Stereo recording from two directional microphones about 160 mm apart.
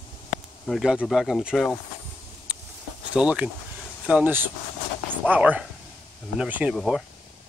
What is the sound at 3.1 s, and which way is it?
Speech, 5° right (ahead or behind).